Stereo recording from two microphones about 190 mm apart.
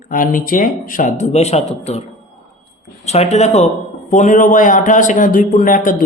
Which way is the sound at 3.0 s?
35° left (ahead or behind).